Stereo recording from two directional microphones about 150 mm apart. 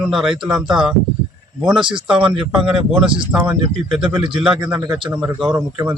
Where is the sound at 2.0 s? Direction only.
5° right (ahead or behind).